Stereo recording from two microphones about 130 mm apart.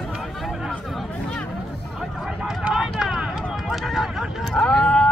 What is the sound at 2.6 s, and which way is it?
Clip-clop, 5° right (ahead or behind).